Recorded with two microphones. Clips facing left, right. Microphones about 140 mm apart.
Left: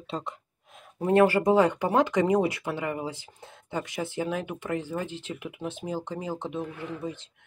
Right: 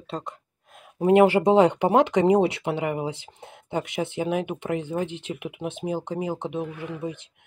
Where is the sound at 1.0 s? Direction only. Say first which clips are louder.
Right 4 dB; 20° right (ahead or behind).